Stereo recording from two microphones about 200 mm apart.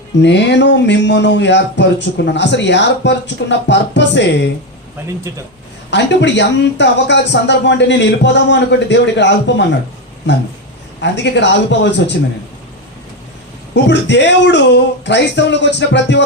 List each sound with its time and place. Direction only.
0.2 s speech: 60° left (ahead or behind)
5.9 s speech: 60° left (ahead or behind)
13.7 s speech: 60° left (ahead or behind)